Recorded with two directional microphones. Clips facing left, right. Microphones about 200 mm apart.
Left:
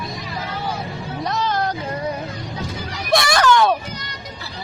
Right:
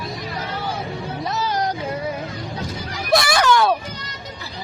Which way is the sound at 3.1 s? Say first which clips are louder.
Left 1 dB; 5° right (ahead or behind).